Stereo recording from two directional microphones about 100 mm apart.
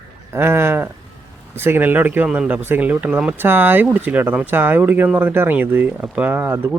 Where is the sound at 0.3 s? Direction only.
25° right (ahead or behind).